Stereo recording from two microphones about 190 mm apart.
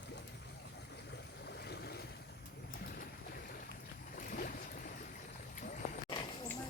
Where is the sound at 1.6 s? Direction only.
60° left (ahead or behind).